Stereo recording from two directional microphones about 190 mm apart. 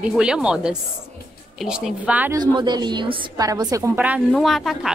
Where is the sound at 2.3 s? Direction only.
20° right (ahead or behind).